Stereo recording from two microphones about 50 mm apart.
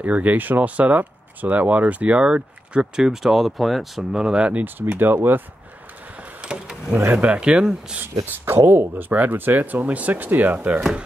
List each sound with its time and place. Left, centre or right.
0.0 s speech: right; by 4.0 s centre
4.1 s speech: centre
4.5 s speech: right
6.1 s vehicle: right
6.9 s speech: right
7.2 s speech: right
8.6 s speech: right